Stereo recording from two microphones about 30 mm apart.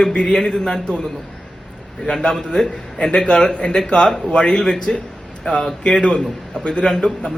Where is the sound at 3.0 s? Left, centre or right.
Left.